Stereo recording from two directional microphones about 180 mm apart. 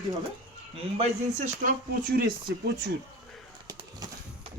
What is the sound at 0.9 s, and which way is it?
Speech, 40° right (ahead or behind).